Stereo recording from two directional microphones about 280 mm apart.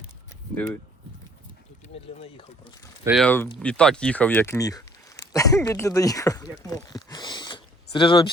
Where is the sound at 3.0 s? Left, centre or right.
Centre.